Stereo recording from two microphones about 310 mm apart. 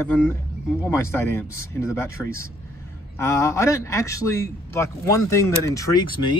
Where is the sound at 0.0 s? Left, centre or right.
Centre.